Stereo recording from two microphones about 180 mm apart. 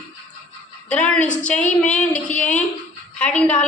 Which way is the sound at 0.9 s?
10° left (ahead or behind).